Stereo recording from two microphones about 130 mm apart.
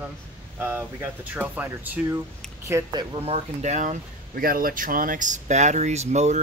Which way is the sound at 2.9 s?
35° right (ahead or behind).